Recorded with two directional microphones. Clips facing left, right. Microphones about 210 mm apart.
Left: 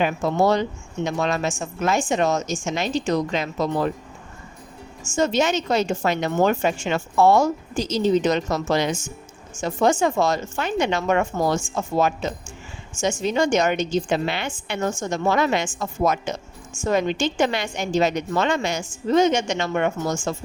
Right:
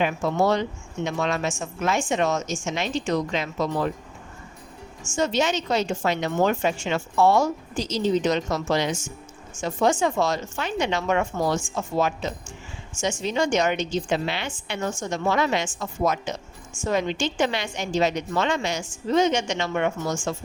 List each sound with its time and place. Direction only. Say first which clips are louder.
0.0 s speech: left 2 dB; 40° left (ahead or behind)
5.1 s a woman's voice: left 3 dB; 50° left (ahead or behind)